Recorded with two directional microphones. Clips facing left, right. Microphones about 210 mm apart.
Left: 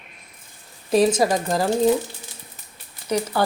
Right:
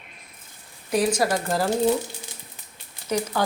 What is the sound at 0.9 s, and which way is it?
Speech, 25° left (ahead or behind).